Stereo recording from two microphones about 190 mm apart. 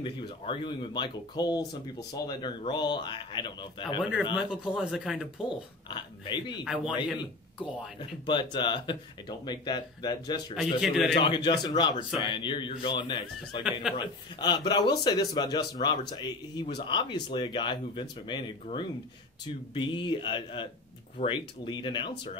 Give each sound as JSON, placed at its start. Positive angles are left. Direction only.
{"t": 0.0, "sound": "speech", "side_deg": 25}
{"t": 4.5, "sound": "speech", "side_deg": -5}
{"t": 5.9, "sound": "speech", "side_deg": 25}
{"t": 6.6, "sound": "speech", "side_deg": 0}
{"t": 8.3, "sound": "speech", "side_deg": 25}
{"t": 10.5, "sound": "speech", "side_deg": 0}
{"t": 11.1, "sound": "speech", "side_deg": 25}